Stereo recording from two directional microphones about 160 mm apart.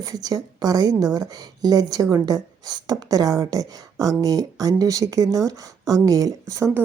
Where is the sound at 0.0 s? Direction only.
25° right (ahead or behind).